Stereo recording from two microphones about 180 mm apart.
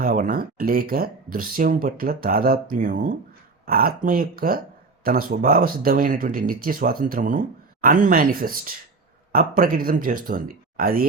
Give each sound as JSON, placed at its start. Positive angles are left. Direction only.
{"t": 0.0, "sound": "speech", "side_deg": -55}